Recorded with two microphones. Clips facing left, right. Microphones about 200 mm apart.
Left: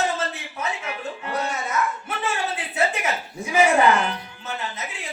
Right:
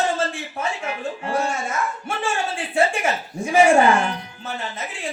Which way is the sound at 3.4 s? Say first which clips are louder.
Right 5 dB; 30° right (ahead or behind).